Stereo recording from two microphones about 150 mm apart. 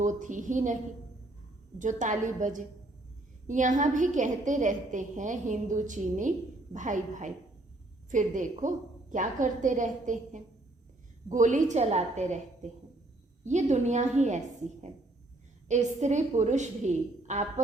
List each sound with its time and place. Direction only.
0.0 s a woman's voice: 55° right (ahead or behind)
1.8 s a woman's voice: 55° right (ahead or behind)